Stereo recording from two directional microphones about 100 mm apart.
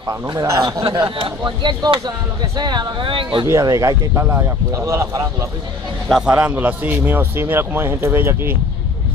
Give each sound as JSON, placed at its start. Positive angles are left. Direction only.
{"t": 0.3, "sound": "a man's voice", "side_deg": -40}
{"t": 1.0, "sound": "speech", "side_deg": -55}
{"t": 3.4, "sound": "a man's voice", "side_deg": -35}
{"t": 4.1, "sound": "a man's voice", "side_deg": -25}
{"t": 6.0, "sound": "a man's voice", "side_deg": -5}
{"t": 6.4, "sound": "a man's voice", "side_deg": -15}